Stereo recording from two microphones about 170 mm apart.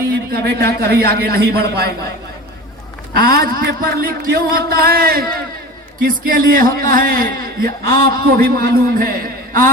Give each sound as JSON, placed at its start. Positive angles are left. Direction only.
{"t": 0.3, "sound": "a man's voice", "side_deg": -65}
{"t": 3.1, "sound": "speech", "side_deg": -60}